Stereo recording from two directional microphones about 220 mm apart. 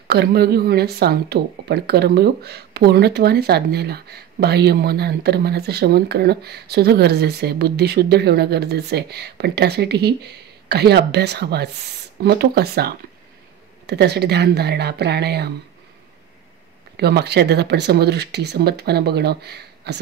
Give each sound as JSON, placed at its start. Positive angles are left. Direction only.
{"t": 0.1, "sound": "speech", "side_deg": -45}
{"t": 16.9, "sound": "speech", "side_deg": -50}